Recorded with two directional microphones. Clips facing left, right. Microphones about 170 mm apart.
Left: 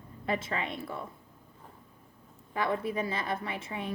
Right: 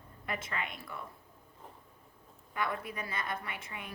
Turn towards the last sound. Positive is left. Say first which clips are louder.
# left 8 dB
turn(degrees=25)  # may be behind; listen again after turning